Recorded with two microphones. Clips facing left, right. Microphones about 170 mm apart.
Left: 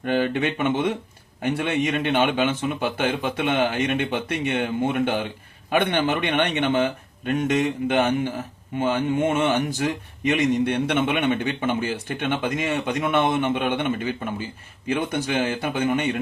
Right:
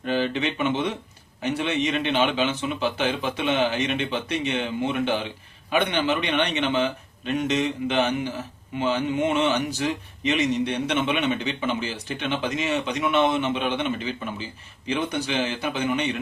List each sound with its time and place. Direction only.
0.0 s speech: 55° left (ahead or behind)